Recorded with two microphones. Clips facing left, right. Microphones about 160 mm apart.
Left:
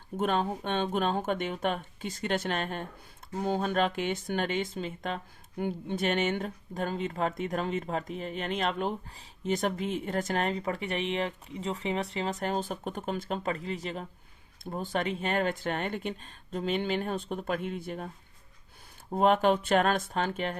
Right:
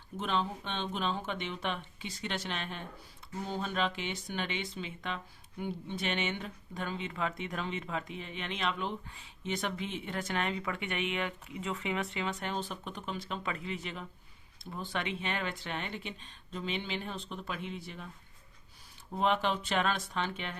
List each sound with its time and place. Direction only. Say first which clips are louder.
0.2 s speech: left 5 dB; 50° left (ahead or behind)
19.1 s speech: left 7 dB; 50° left (ahead or behind)